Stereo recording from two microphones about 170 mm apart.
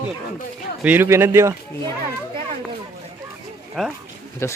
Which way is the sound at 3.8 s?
Centre (ahead or behind).